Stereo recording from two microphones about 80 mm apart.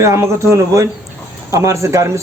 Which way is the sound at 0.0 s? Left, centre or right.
Right.